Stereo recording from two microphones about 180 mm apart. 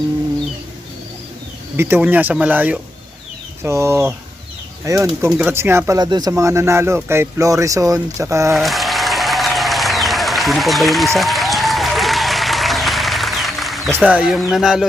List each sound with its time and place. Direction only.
1.7 s speech: 10° right (ahead or behind)
8.5 s applause: centre (ahead or behind)
13.9 s speech: 10° right (ahead or behind)